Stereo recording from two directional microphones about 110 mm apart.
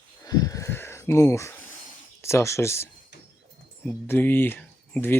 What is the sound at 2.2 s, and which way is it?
Speech, 25° left (ahead or behind).